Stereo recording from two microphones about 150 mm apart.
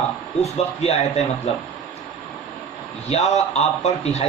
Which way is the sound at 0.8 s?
45° left (ahead or behind).